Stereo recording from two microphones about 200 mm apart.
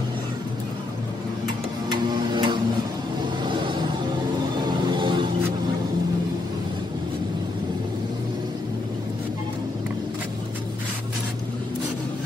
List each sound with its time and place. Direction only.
1.9 s music: 20° right (ahead or behind)
3.4 s vehicle: 25° right (ahead or behind)
4.9 s music: 25° right (ahead or behind)